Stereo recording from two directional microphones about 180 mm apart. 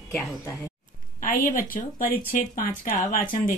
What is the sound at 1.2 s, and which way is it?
Speech, 50° left (ahead or behind).